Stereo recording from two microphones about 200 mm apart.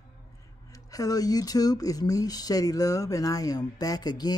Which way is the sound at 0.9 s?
20° left (ahead or behind).